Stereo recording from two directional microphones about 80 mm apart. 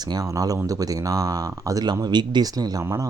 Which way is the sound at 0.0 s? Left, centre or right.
Right.